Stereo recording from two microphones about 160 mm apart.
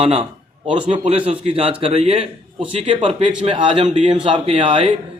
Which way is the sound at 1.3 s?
40° right (ahead or behind).